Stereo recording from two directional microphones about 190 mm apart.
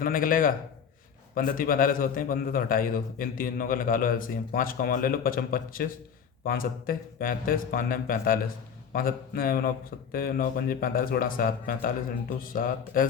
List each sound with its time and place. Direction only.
0.0 s a man's voice: 45° left (ahead or behind)